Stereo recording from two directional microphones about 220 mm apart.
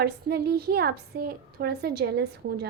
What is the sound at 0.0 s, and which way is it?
A woman's voice, 45° right (ahead or behind).